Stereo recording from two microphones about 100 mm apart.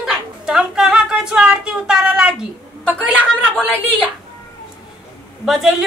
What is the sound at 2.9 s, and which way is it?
Speech, 15° right (ahead or behind).